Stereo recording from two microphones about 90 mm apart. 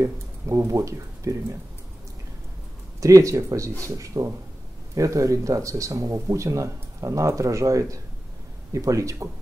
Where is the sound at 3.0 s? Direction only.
35° right (ahead or behind).